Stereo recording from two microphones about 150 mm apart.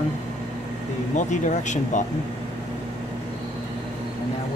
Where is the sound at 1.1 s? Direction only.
55° left (ahead or behind).